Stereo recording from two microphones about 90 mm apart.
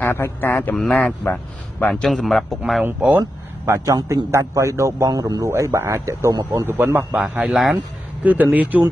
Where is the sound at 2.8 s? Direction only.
20° right (ahead or behind).